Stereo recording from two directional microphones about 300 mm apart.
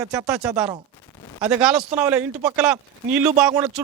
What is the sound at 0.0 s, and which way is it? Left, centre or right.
Speech, centre.